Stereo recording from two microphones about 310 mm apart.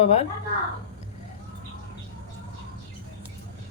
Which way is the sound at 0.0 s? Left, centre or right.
Left.